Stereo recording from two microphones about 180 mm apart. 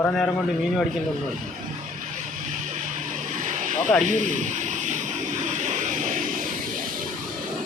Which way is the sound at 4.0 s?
45° right (ahead or behind).